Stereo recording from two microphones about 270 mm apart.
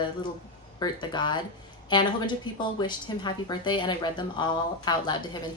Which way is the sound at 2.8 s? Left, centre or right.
Centre.